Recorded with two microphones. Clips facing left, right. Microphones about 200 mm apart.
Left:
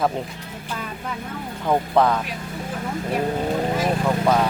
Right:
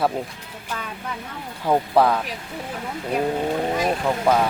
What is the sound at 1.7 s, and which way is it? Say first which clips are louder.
Speech: right 1 dB; 5° right (ahead or behind).